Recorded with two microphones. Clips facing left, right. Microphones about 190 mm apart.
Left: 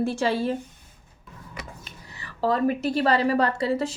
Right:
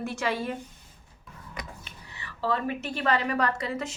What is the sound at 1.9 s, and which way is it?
A woman's voice, 40° left (ahead or behind).